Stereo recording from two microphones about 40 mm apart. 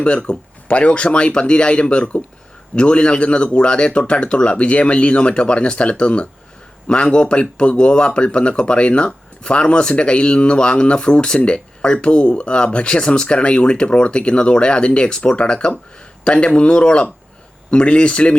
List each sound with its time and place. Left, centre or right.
0.0 s speech: left